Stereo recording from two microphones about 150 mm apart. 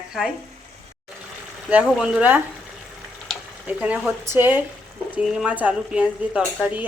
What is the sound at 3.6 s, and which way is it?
Speech, 10° right (ahead or behind).